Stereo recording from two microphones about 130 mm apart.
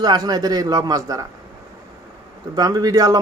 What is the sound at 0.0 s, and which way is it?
A man's voice, 30° right (ahead or behind).